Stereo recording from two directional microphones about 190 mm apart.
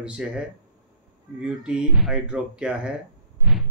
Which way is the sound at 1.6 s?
5° right (ahead or behind).